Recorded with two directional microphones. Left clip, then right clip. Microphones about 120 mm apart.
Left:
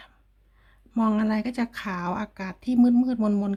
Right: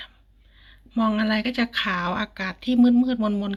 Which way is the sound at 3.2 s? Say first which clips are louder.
Right 1 dB; 45° left (ahead or behind).